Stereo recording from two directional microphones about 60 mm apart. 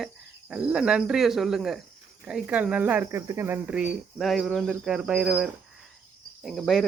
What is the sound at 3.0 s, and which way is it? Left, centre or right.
Speech, right.